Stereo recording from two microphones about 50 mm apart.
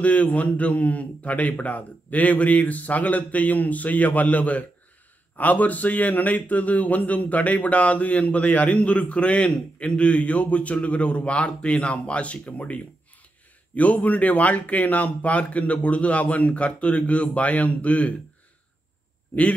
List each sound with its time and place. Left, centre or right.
0.0 s a man's voice: left